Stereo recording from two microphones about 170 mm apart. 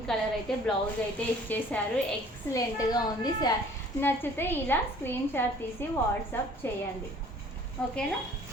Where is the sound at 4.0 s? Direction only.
15° left (ahead or behind).